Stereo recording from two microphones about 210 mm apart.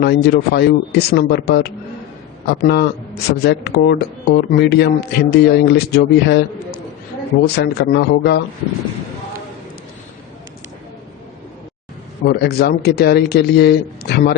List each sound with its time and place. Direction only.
0.0 s speech: 50° left (ahead or behind)
12.2 s speech: 50° left (ahead or behind)